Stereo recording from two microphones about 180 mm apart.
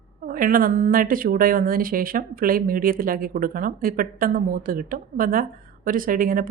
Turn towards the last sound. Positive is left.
turn(degrees=-50)  # may be behind; listen again after turning